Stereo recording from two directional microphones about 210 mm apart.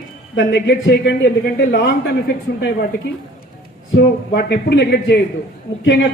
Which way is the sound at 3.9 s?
55° left (ahead or behind).